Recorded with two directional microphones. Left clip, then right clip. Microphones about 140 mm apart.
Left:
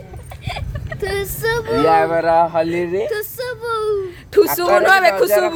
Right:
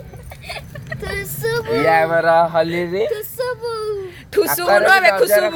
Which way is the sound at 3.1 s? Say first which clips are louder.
Right 1 dB; 15° left (ahead or behind).